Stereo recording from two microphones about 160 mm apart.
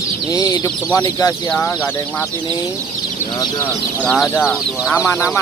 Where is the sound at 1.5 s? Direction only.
10° left (ahead or behind).